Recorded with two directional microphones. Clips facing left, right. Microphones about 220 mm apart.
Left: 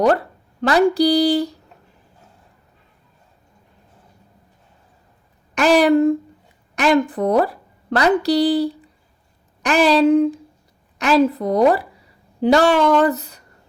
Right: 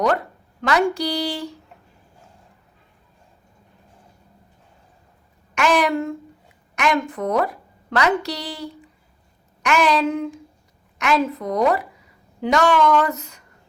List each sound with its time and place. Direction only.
0.6 s a woman's voice: 35° left (ahead or behind)
5.5 s a woman's voice: 35° left (ahead or behind)